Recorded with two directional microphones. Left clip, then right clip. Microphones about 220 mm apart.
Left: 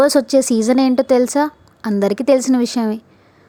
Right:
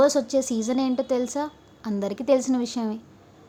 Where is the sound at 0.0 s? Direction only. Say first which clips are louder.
Left 7 dB; 40° left (ahead or behind).